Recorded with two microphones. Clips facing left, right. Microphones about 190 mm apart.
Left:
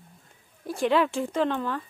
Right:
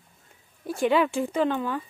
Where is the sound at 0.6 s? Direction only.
Centre (ahead or behind).